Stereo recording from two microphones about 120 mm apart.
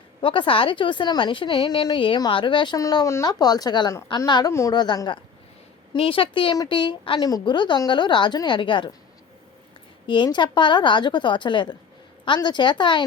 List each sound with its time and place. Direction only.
0.2 s a woman's voice: 45° left (ahead or behind)
2.8 s a woman's voice: 30° left (ahead or behind)
7.2 s a woman's voice: 30° left (ahead or behind)
10.2 s a woman's voice: 40° left (ahead or behind)